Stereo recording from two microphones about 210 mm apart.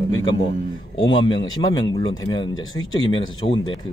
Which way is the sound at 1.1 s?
20° left (ahead or behind).